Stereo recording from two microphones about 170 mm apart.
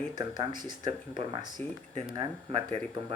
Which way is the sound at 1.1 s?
25° right (ahead or behind).